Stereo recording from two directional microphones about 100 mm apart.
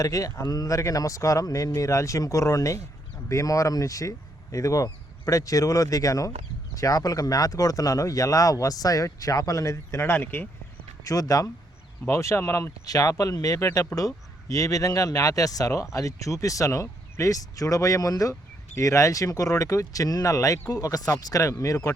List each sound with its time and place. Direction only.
0.0 s a man's voice: 35° left (ahead or behind); by 10.5 s 20° left (ahead or behind)
11.0 s a man's voice: 35° left (ahead or behind)
12.8 s a man's voice: 35° left (ahead or behind)